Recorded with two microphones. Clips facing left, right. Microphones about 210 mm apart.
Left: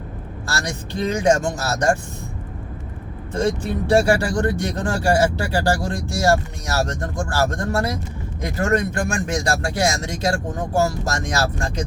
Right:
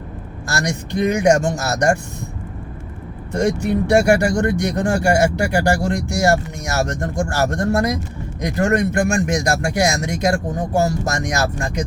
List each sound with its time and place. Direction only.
0.5 s speech: 15° right (ahead or behind)
3.7 s speech: 15° right (ahead or behind)